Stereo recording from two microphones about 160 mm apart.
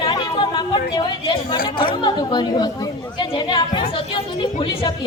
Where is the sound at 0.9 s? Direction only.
30° left (ahead or behind).